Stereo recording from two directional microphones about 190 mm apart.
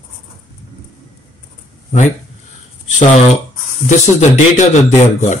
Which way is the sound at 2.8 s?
40° left (ahead or behind).